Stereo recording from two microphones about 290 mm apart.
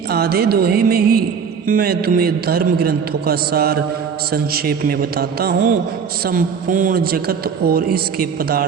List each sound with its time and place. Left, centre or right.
0.1 s a man's voice: right